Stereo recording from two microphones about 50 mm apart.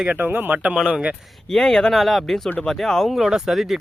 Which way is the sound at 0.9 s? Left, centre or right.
Right.